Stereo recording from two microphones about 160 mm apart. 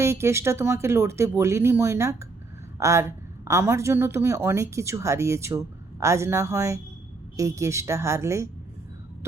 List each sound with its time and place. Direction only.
0.0 s a woman's voice: 15° right (ahead or behind)